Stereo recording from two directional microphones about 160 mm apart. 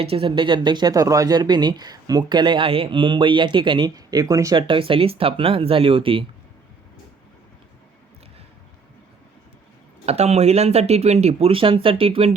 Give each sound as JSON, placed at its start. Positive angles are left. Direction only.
{"t": 0.0, "sound": "speech", "side_deg": -35}
{"t": 10.1, "sound": "speech", "side_deg": -40}